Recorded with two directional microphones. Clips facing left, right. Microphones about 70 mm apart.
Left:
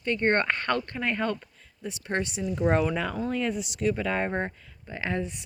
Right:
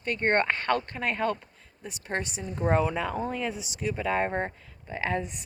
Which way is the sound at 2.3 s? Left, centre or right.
Right.